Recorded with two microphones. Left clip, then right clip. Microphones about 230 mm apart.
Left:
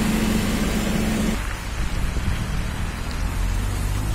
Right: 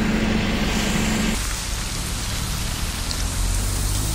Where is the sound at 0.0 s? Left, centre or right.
Left.